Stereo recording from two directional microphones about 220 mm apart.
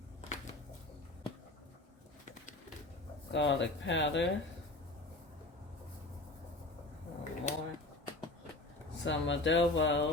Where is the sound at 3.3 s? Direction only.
55° left (ahead or behind).